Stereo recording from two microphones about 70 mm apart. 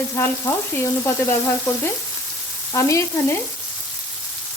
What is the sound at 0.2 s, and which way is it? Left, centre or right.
Frying, left.